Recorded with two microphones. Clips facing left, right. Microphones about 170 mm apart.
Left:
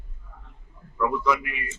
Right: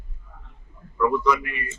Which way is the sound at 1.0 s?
5° left (ahead or behind).